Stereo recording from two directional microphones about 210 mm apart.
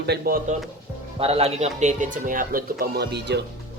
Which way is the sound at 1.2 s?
30° right (ahead or behind).